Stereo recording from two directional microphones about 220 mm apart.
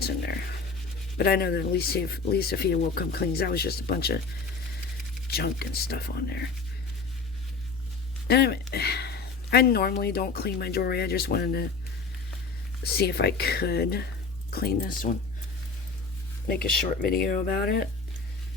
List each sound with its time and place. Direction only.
1.2 s speech: 45° left (ahead or behind)
5.3 s speech: 45° left (ahead or behind)
8.3 s speech: 45° left (ahead or behind)
12.8 s speech: 45° left (ahead or behind)
17.0 s speech: 40° left (ahead or behind)